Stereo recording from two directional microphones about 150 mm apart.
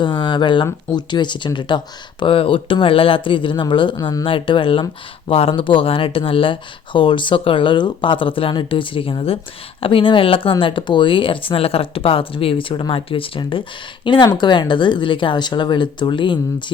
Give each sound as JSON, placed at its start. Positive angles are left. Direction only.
{"t": 0.0, "sound": "speech", "side_deg": 30}